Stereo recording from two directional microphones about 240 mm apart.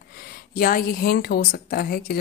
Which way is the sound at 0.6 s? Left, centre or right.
Left.